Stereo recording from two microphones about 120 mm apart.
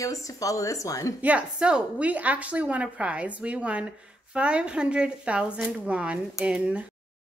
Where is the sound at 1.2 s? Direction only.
10° right (ahead or behind).